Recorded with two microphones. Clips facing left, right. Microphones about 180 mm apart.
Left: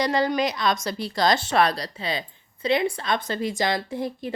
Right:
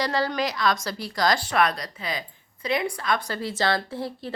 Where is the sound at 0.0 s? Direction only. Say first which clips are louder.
Left 3 dB; 20° left (ahead or behind).